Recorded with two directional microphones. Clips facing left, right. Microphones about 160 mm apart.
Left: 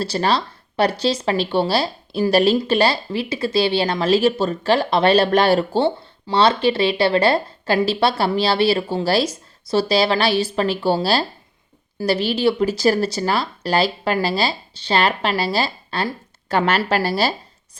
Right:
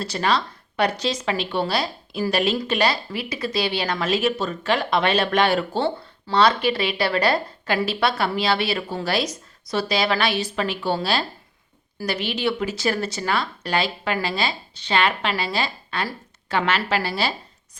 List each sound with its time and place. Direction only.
0.0 s a woman's voice: 30° left (ahead or behind)